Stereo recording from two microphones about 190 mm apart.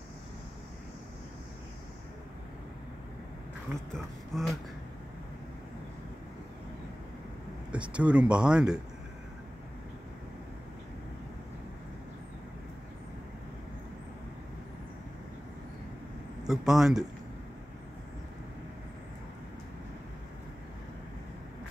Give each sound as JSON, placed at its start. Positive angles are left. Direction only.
{"t": 3.9, "sound": "speech", "side_deg": 0}
{"t": 7.7, "sound": "speech", "side_deg": -5}
{"t": 16.4, "sound": "speech", "side_deg": 0}